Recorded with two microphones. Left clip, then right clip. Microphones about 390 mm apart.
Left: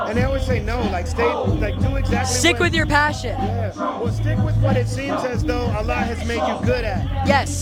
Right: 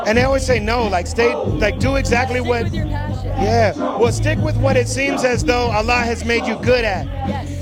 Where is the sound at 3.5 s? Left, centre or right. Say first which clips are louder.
Right 9 dB; right.